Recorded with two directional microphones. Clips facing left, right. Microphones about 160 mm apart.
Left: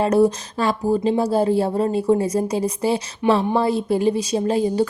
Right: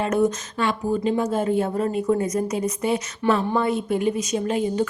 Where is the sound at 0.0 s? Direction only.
35° left (ahead or behind).